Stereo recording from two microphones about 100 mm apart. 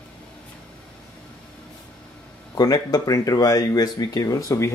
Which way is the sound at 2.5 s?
40° left (ahead or behind).